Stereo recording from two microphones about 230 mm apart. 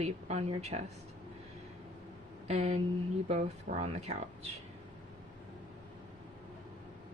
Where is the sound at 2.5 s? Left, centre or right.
Right.